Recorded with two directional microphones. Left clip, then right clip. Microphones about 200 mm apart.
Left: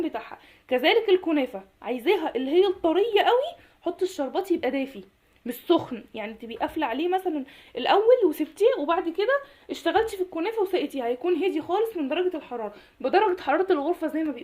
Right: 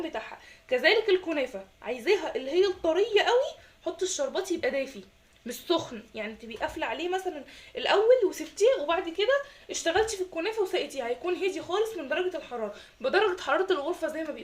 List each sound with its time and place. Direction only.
0.7 s a woman's voice: 40° left (ahead or behind)